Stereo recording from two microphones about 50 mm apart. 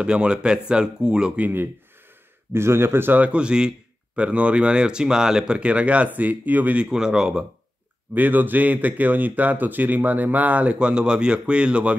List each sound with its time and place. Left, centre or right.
0.0 s speech: centre
2.5 s speech: right
3.2 s speech: right
5.6 s speech: right
6.8 s speech: centre
8.1 s speech: right